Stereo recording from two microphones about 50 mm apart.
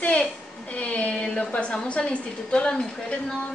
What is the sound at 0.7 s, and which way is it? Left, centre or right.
A woman's voice, left.